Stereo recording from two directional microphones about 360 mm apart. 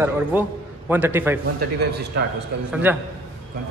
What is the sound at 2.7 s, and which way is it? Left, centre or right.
Speech, centre.